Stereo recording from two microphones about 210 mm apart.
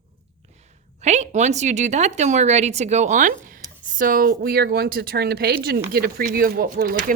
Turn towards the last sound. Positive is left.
turn(degrees=-45)  # may be behind; listen again after turning